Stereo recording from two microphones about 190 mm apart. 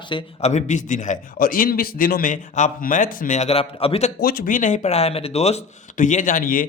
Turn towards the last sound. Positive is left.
turn(degrees=45)  # may be behind; listen again after turning